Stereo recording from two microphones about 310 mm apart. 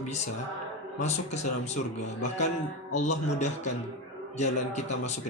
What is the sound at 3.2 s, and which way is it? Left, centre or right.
A man's voice, left.